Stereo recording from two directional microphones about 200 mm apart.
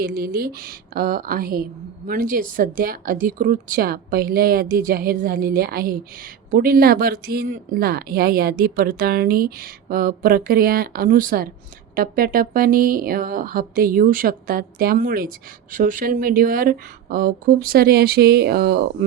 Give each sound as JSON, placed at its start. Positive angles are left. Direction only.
{"t": 0.0, "sound": "speech", "side_deg": -45}